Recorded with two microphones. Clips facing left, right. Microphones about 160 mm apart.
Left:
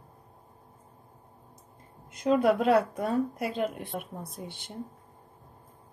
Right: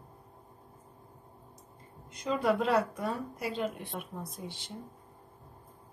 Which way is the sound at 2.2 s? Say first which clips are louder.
Left 5 dB; 55° left (ahead or behind).